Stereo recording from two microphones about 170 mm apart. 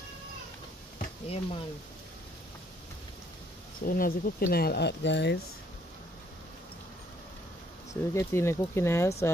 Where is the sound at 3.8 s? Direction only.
55° left (ahead or behind); by 5.4 s 90° left.